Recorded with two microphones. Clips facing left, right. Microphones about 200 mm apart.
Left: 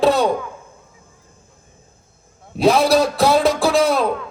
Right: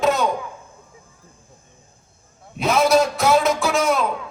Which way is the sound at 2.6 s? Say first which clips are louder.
Left 3 dB; 35° left (ahead or behind).